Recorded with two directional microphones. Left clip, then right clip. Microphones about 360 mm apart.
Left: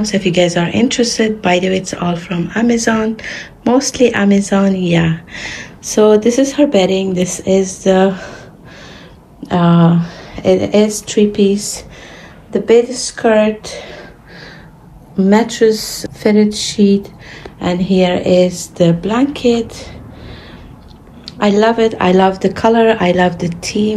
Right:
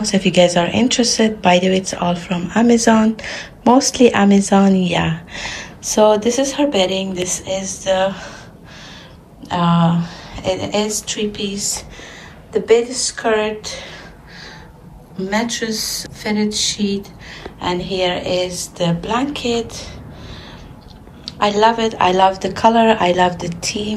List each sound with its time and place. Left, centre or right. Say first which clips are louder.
0.0 s speech: even; centre
9.4 s speech: left 3 dB; centre
15.2 s speech: left 9 dB; centre
21.3 s speech: left 2 dB; centre